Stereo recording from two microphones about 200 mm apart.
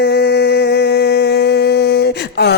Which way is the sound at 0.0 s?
55° left (ahead or behind).